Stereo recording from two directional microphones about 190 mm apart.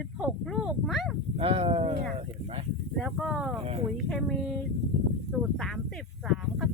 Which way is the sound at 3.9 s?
Centre (ahead or behind).